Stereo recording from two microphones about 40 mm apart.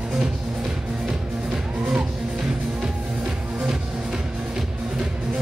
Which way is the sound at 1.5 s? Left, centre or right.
Right.